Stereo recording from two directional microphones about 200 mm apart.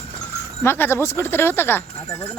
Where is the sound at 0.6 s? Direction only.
10° left (ahead or behind).